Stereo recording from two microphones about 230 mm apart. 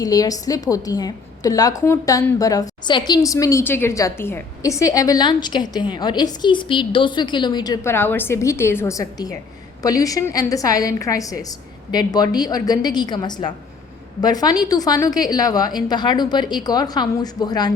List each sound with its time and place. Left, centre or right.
0.0 s a woman's voice: centre